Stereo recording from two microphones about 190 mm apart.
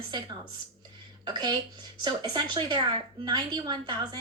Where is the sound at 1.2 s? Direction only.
25° right (ahead or behind).